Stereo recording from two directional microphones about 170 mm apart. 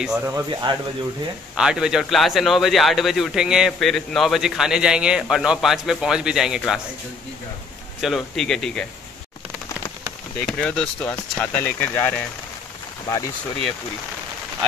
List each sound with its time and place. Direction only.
0.0 s speech: 5° right (ahead or behind)
0.3 s speech: 20° right (ahead or behind)
1.6 s speech: 5° right (ahead or behind)
8.0 s speech: centre (ahead or behind)
10.4 s speech: 5° left (ahead or behind)